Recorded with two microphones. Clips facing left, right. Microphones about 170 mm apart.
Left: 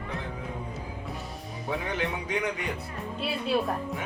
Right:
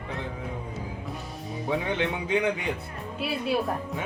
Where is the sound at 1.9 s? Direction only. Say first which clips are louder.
Right 3 dB; 25° right (ahead or behind).